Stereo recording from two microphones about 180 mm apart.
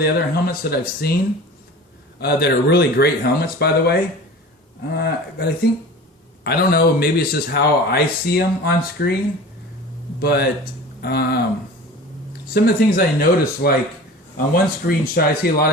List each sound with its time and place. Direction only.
0.0 s speech: 60° left (ahead or behind)
2.1 s speech: 60° left (ahead or behind)
10.2 s speech: 60° left (ahead or behind)
12.5 s speech: 55° left (ahead or behind)